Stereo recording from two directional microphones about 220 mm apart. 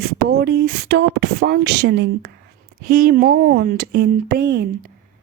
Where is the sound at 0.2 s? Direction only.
50° right (ahead or behind).